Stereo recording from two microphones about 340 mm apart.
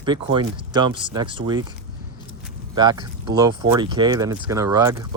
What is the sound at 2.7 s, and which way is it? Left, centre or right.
Speech, centre.